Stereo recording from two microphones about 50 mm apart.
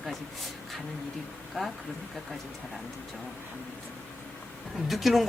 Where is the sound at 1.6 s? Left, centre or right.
Centre.